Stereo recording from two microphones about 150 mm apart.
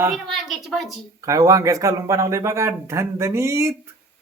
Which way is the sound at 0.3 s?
Centre (ahead or behind).